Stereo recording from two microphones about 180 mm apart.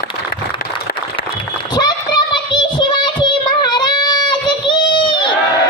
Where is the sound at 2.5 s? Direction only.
25° left (ahead or behind).